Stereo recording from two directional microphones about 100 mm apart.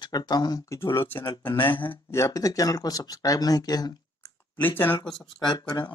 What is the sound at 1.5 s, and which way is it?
Speech, 55° left (ahead or behind).